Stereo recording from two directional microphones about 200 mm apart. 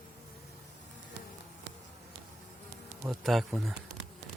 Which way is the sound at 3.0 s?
Centre (ahead or behind).